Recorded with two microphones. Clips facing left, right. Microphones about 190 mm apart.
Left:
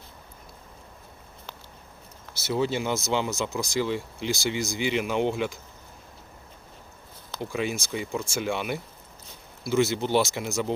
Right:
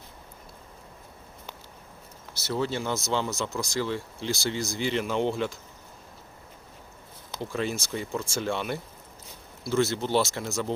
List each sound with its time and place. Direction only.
2.5 s speech: 15° left (ahead or behind)
7.3 s speech: 10° left (ahead or behind)